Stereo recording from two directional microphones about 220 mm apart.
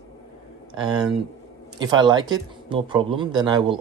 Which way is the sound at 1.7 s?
20° right (ahead or behind).